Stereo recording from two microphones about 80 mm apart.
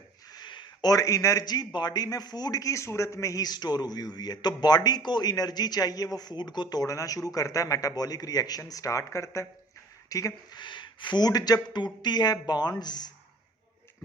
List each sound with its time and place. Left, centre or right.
0.3 s a sound: left
1.5 s a man's voice: left
10.5 s speech: left